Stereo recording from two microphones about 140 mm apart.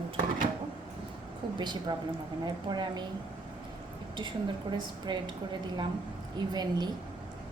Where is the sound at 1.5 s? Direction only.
30° right (ahead or behind).